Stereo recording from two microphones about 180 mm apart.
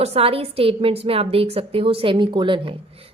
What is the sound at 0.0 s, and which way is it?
A woman's voice, 35° right (ahead or behind).